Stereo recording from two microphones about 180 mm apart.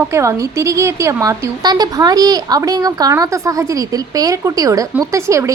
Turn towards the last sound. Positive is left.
turn(degrees=-15)  # may be behind; listen again after turning